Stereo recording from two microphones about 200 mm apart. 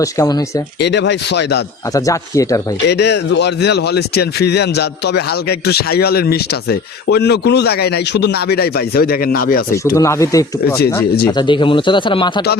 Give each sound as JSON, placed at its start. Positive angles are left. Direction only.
{"t": 0.0, "sound": "speech", "side_deg": 20}
{"t": 0.8, "sound": "speech", "side_deg": 60}
{"t": 1.9, "sound": "speech", "side_deg": 15}
{"t": 2.9, "sound": "a man's voice", "side_deg": 60}
{"t": 9.7, "sound": "speech", "side_deg": 15}